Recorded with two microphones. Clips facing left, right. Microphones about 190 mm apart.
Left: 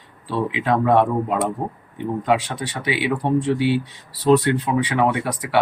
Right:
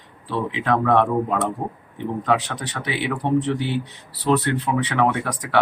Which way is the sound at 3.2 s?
10° left (ahead or behind).